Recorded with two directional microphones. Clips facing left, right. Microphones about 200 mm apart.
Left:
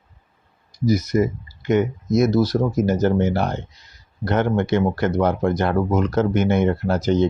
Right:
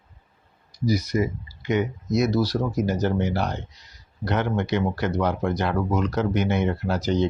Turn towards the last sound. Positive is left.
turn(degrees=50)  # may be behind; listen again after turning